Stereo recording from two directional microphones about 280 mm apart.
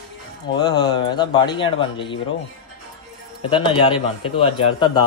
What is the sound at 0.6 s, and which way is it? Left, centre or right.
A man's voice, centre.